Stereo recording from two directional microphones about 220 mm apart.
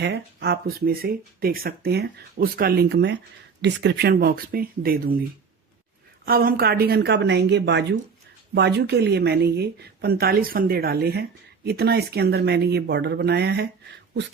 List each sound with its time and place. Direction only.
0.0 s a woman's voice: 50° right (ahead or behind)
6.2 s a woman's voice: 40° right (ahead or behind)